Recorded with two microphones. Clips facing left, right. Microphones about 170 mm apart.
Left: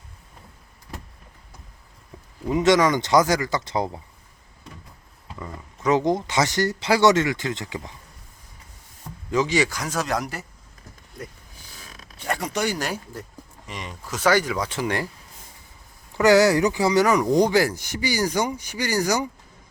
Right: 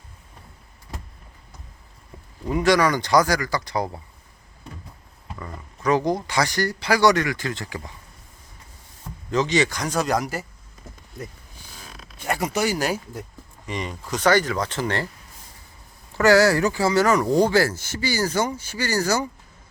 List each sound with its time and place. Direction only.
2.5 s speech: 20° left (ahead or behind)
5.4 s speech: 20° left (ahead or behind)
9.3 s speech: 10° left (ahead or behind)
12.3 s speech: 5° right (ahead or behind); by 15.0 s 10° left (ahead or behind)
16.1 s speech: 20° left (ahead or behind)